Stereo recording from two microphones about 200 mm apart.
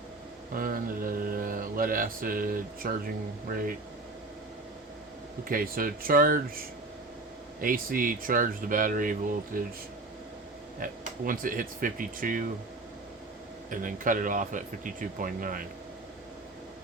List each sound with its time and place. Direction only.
0.5 s mantra: 45° right (ahead or behind)
5.5 s mantra: 45° right (ahead or behind)
11.3 s mantra: 45° right (ahead or behind)
13.7 s speech: 40° right (ahead or behind)